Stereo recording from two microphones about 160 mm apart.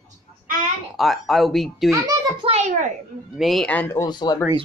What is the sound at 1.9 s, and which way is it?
Speech, 20° right (ahead or behind).